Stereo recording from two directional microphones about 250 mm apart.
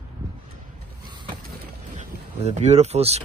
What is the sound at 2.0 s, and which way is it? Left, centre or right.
Speech, right.